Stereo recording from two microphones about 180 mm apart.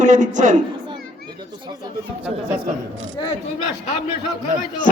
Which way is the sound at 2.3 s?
Centre (ahead or behind).